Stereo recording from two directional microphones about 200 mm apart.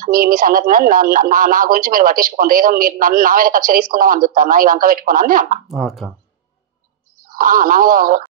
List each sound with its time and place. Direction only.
0.0 s speech: 45° right (ahead or behind)
5.7 s speech: centre (ahead or behind)
7.3 s speech: 45° right (ahead or behind)